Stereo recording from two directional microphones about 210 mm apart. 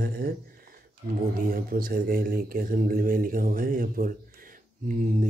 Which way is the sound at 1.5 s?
45° right (ahead or behind).